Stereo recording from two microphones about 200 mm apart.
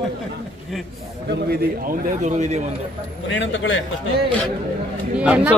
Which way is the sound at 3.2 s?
65° left (ahead or behind).